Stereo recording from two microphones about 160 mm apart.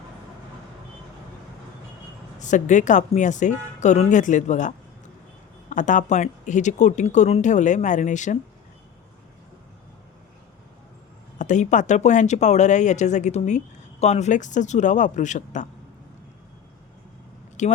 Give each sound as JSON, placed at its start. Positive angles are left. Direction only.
{"t": 2.4, "sound": "speech", "side_deg": 50}
{"t": 11.3, "sound": "speech", "side_deg": 50}
{"t": 17.6, "sound": "speech", "side_deg": 50}